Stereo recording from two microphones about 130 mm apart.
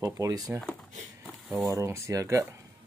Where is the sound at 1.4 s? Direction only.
10° right (ahead or behind).